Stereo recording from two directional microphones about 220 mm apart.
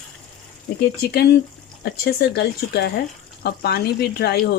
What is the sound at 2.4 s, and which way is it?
Speech, 45° left (ahead or behind).